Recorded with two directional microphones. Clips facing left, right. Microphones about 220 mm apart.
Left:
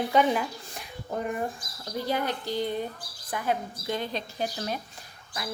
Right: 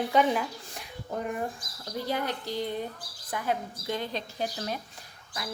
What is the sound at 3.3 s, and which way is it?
Speech, 20° left (ahead or behind).